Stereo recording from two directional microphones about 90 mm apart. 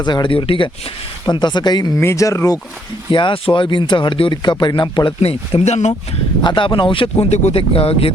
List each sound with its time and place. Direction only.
0.0 s speech: 55° left (ahead or behind); by 0.7 s 80° left
1.2 s speech: 55° left (ahead or behind)
2.0 s speech: 35° left (ahead or behind)
3.1 s speech: 65° left (ahead or behind); by 6.0 s 90° left
6.4 s speech: 65° left (ahead or behind)
7.5 s speech: 90° left